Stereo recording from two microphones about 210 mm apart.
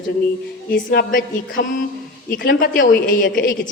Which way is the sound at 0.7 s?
45° left (ahead or behind).